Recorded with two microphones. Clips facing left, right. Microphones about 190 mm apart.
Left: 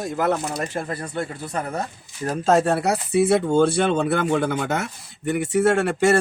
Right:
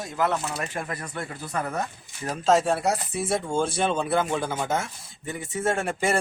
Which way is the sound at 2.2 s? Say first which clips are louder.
Left 3 dB; 55° left (ahead or behind).